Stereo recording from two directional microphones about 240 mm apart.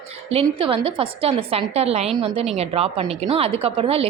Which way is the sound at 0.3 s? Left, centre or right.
Right.